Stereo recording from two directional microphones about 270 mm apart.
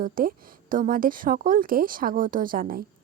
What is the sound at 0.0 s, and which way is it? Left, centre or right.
A woman's voice, right.